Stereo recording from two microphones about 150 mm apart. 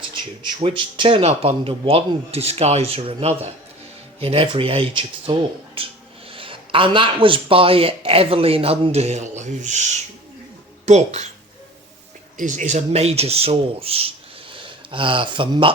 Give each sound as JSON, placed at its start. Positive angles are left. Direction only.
{"t": 0.6, "sound": "speech", "side_deg": -35}
{"t": 12.4, "sound": "speech", "side_deg": -55}